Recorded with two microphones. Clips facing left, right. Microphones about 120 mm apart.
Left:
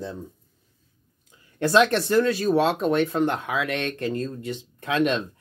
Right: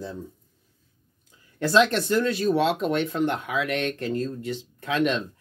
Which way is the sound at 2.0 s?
50° left (ahead or behind).